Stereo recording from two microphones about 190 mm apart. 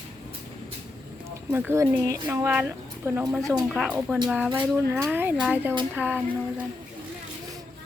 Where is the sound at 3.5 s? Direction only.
Centre (ahead or behind).